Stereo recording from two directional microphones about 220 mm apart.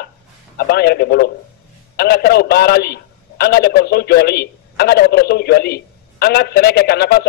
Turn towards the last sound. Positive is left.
turn(degrees=45)  # may be behind; listen again after turning